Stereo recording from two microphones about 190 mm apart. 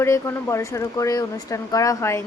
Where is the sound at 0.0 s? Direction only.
15° left (ahead or behind).